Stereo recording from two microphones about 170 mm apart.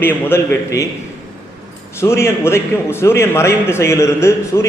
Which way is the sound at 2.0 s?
15° left (ahead or behind).